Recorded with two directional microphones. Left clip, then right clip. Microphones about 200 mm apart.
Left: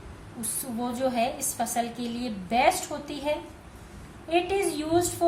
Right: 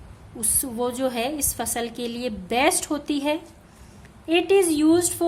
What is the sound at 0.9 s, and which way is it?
A woman's voice, 50° right (ahead or behind).